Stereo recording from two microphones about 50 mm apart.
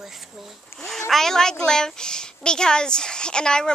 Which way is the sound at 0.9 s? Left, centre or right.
Centre.